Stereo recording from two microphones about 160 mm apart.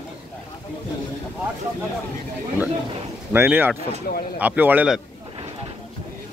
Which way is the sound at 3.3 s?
15° right (ahead or behind).